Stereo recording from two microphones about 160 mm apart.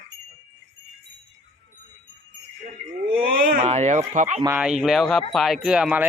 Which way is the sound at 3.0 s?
65° right (ahead or behind).